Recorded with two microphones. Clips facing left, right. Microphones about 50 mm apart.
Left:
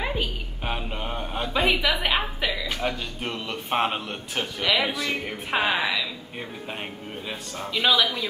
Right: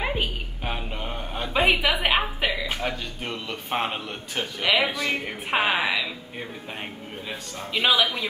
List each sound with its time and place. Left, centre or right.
0.0 s a sound: right
0.7 s a sound: centre
1.5 s a woman's voice: centre
2.8 s a man's voice: centre
4.6 s a woman's voice: centre
7.7 s a woman's voice: centre